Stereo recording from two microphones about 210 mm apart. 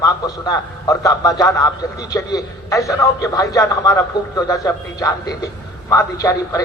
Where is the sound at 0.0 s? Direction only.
15° left (ahead or behind).